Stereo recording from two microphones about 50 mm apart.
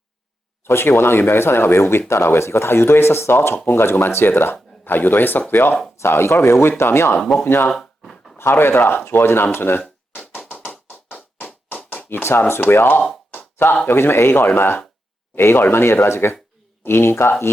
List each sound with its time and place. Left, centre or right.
0.6 s speech: left
6.0 s speech: left
7.2 s speech: centre
7.4 s speech: left
10.5 s music: left
11.4 s a sound: left
12.6 s speech: left